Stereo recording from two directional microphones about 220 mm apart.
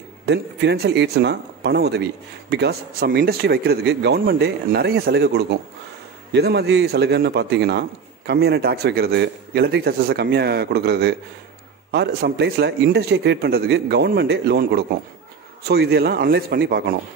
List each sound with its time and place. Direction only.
0.3 s speech: 50° right (ahead or behind)